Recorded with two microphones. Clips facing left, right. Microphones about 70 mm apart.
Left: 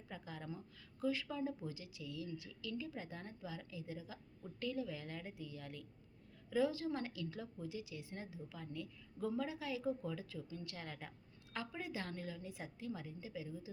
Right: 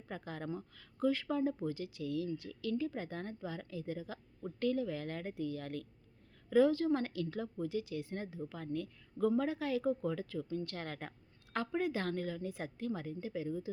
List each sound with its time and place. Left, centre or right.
0.1 s speech: right